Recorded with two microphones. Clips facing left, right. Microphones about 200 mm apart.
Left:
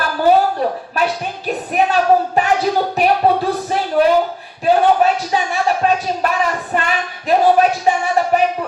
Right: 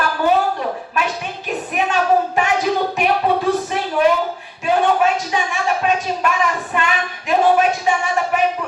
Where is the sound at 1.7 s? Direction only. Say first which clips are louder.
Left 3 dB; 35° left (ahead or behind).